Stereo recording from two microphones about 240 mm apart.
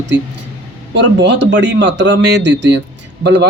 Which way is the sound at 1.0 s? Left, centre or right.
Right.